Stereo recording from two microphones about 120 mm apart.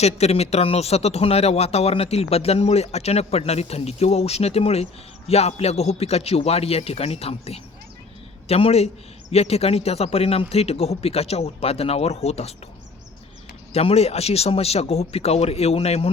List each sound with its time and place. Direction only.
0.0 s speech: 60° left (ahead or behind)
13.7 s speech: 60° left (ahead or behind)